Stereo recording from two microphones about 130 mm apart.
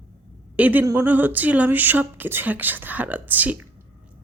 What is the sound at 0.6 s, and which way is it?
Speech, 10° right (ahead or behind).